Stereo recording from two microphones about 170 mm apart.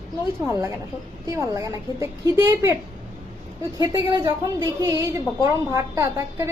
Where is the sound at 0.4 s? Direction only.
15° right (ahead or behind).